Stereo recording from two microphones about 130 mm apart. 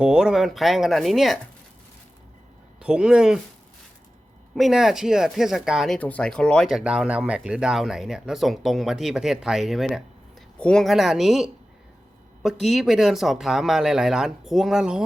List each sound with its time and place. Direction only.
0.0 s speech: 5° right (ahead or behind)
2.7 s speech: 5° right (ahead or behind)
4.5 s speech: centre (ahead or behind)
6.0 s speech: 10° left (ahead or behind); by 15.0 s 5° right (ahead or behind)